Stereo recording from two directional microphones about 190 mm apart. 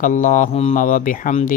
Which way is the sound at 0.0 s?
45° left (ahead or behind).